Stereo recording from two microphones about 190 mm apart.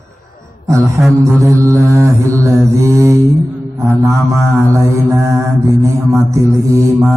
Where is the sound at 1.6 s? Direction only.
15° right (ahead or behind).